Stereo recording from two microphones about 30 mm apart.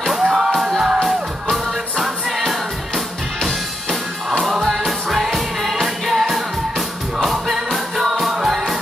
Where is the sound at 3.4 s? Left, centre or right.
Centre.